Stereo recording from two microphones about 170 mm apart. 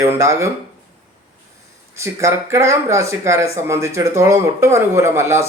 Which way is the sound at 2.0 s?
15° right (ahead or behind).